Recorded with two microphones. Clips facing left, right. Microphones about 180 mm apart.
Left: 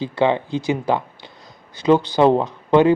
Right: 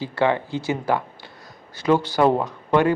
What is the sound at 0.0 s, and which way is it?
Speech, 20° left (ahead or behind).